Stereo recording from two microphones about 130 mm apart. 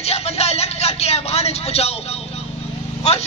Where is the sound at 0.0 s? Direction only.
55° left (ahead or behind).